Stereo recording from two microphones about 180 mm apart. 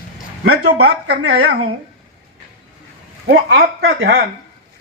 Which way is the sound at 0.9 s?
70° right (ahead or behind).